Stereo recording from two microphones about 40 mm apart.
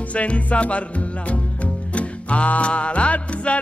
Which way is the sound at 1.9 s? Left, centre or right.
Left.